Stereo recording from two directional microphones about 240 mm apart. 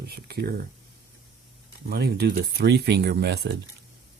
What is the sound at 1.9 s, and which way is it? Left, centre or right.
Speech, right.